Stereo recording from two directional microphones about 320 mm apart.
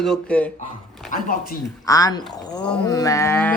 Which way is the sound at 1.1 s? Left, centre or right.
Left.